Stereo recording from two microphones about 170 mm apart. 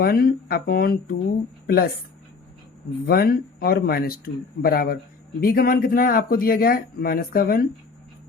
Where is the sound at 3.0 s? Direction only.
60° left (ahead or behind).